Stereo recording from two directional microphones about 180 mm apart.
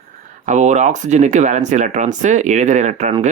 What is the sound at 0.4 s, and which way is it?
Speech, 40° right (ahead or behind).